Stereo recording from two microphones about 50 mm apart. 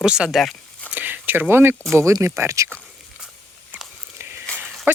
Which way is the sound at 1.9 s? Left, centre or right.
Right.